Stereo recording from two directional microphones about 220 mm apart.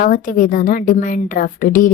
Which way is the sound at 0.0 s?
35° left (ahead or behind).